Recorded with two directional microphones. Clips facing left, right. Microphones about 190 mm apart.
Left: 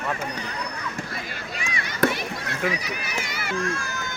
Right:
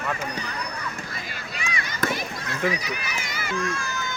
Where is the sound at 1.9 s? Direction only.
65° left (ahead or behind).